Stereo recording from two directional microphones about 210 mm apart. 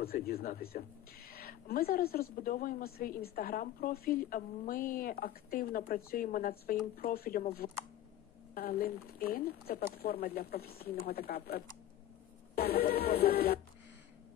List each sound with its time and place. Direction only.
0.0 s a woman's voice: 45° left (ahead or behind)
8.5 s a woman's voice: 45° left (ahead or behind)